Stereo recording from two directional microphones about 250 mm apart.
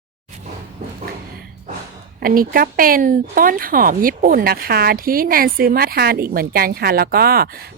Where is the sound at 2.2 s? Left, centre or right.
Right.